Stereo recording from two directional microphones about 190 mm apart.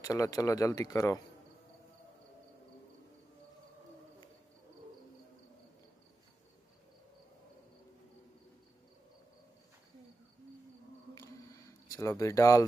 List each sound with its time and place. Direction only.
0.0 s speech: 15° left (ahead or behind)
11.9 s speech: 15° left (ahead or behind)